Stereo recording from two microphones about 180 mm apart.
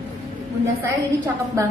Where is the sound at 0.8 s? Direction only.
15° right (ahead or behind).